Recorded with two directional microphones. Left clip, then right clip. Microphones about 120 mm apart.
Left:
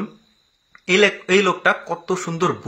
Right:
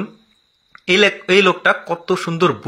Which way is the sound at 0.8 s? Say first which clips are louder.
Right 2 dB; 30° right (ahead or behind).